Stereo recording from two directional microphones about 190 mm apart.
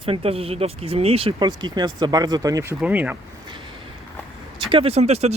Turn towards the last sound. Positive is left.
turn(degrees=-35)  # may be behind; listen again after turning